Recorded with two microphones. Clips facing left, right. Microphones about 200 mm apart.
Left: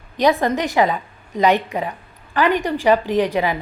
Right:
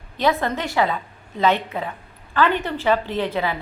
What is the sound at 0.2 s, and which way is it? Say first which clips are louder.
A woman's voice: left 4 dB; 15° left (ahead or behind).